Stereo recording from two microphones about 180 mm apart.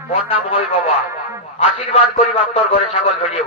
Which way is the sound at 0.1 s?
30° left (ahead or behind).